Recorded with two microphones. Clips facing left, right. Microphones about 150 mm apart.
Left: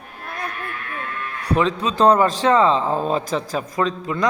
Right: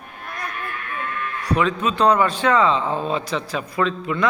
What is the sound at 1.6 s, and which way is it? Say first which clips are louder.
A man's voice: left 2 dB; 35° left (ahead or behind).